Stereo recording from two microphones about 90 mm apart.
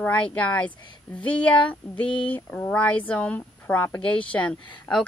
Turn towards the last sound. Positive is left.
turn(degrees=10)  # may be behind; listen again after turning